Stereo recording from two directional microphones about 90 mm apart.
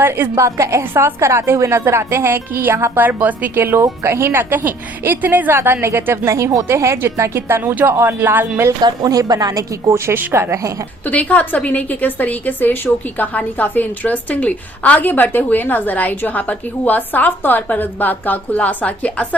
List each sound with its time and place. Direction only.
0.0 s a woman's voice: 25° right (ahead or behind)
6.3 s a woman's voice: 40° right (ahead or behind); by 8.6 s 20° right (ahead or behind)
8.8 s speech: 45° right (ahead or behind)
10.1 s a woman's voice: 25° right (ahead or behind)
11.0 s a woman's voice: 15° left (ahead or behind)